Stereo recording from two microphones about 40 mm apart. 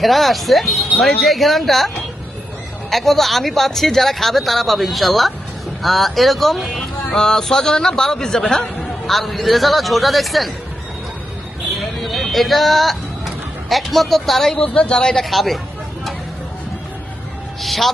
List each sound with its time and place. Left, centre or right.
0.0 s speech: centre
2.9 s speech: centre
6.7 s a man's voice: centre
11.8 s speech: centre
14.5 s speech: left
14.9 s a man's voice: centre
15.2 s speech: centre
17.6 s speech: centre